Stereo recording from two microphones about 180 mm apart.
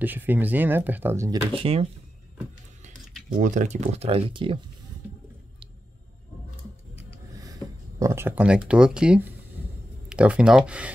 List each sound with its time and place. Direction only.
0.0 s speech: 10° right (ahead or behind)
1.6 s speech: 30° right (ahead or behind)
3.3 s speech: 45° right (ahead or behind); by 4.6 s 30° right (ahead or behind)
8.0 s speech: 15° right (ahead or behind)